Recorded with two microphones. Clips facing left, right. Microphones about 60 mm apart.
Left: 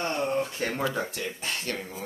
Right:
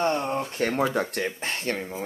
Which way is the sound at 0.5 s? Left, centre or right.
Right.